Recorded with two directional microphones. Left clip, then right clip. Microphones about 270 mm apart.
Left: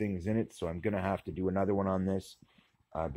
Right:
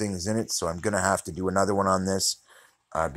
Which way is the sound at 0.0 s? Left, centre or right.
Centre.